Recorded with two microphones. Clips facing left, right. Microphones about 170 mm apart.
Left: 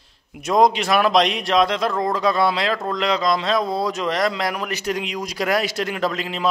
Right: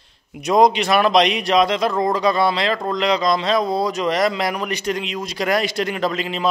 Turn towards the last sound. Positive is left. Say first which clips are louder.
# right 1 dB
turn(degrees=0)  # may be behind; listen again after turning